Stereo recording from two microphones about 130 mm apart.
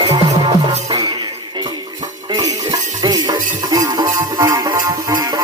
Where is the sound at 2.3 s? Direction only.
30° right (ahead or behind).